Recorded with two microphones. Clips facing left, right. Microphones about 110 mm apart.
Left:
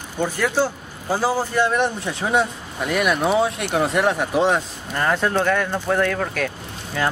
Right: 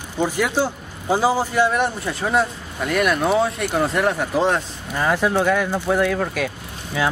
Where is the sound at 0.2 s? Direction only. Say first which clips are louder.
Even; 15° right (ahead or behind).